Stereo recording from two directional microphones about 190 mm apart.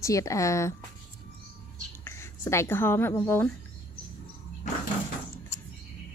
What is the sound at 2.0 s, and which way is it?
Speech, 15° left (ahead or behind).